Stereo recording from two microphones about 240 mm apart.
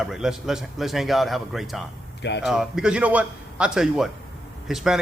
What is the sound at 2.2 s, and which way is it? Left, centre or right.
Speech, left.